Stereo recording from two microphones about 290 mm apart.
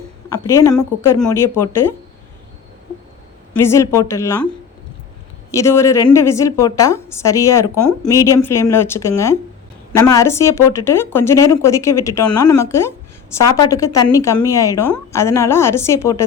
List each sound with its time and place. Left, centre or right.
0.3 s a woman's voice: centre
3.5 s a woman's voice: centre
5.5 s a woman's voice: centre